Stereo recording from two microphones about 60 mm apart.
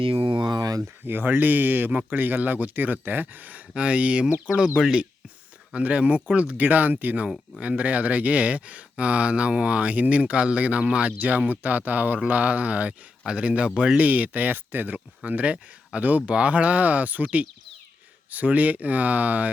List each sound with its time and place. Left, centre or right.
1.0 s speech: right
4.4 s speech: centre
5.7 s speech: right